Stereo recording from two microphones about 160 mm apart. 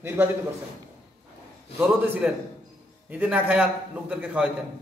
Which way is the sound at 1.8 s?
10° right (ahead or behind).